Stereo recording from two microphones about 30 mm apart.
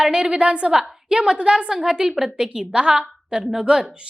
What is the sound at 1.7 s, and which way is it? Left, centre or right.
Speech, centre.